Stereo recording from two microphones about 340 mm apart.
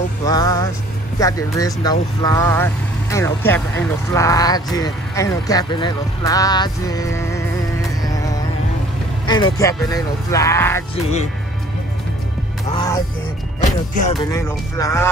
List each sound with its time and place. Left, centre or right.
0.3 s speech: centre
8.0 s music: centre
9.2 s speech: centre
12.7 s speech: centre
13.6 s speech: left
14.2 s speech: centre